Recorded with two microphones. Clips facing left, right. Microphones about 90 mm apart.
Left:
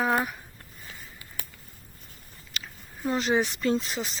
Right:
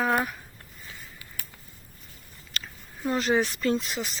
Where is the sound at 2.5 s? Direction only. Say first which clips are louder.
Right 1 dB; 10° left (ahead or behind).